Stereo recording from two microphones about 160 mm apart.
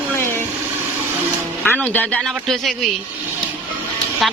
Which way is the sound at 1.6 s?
10° left (ahead or behind).